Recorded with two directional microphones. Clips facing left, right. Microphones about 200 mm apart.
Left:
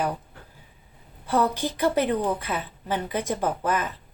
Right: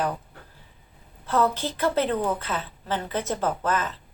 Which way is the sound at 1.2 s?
15° left (ahead or behind).